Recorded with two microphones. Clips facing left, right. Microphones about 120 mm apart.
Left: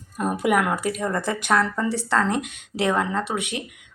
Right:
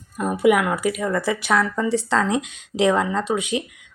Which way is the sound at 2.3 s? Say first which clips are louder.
Right 2 dB; 55° left (ahead or behind).